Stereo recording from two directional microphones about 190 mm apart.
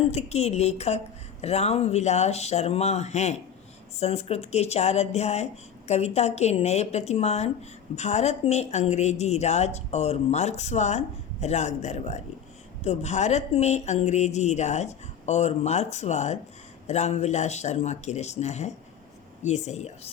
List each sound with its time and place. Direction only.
0.1 s a woman's voice: 35° left (ahead or behind)